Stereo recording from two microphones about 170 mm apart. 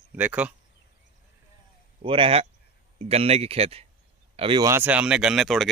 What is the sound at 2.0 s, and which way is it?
Speech, 30° right (ahead or behind).